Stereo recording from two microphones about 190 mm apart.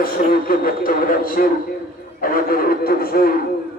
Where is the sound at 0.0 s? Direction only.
50° left (ahead or behind).